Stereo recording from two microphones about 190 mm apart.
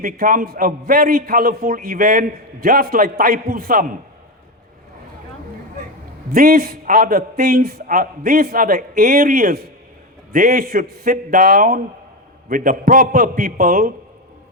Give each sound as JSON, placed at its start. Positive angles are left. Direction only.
{"t": 0.0, "sound": "a man's voice", "side_deg": -45}
{"t": 6.3, "sound": "a man's voice", "side_deg": -50}